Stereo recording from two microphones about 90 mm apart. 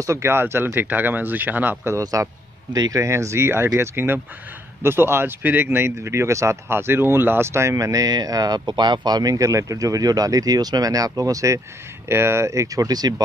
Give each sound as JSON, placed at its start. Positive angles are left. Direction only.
{"t": 0.0, "sound": "speech", "side_deg": -30}
{"t": 2.0, "sound": "speech", "side_deg": -35}